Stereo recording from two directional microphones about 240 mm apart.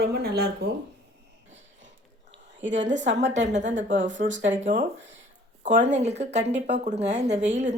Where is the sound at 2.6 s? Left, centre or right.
Right.